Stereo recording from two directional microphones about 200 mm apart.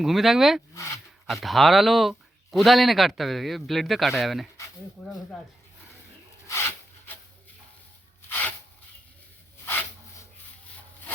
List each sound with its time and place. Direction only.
0.0 s speech: centre (ahead or behind)
0.7 s speech: 15° left (ahead or behind)
1.3 s speech: centre (ahead or behind)
6.5 s rub: 10° left (ahead or behind)
8.3 s a sound: 10° left (ahead or behind)
9.6 s a sound: 10° left (ahead or behind)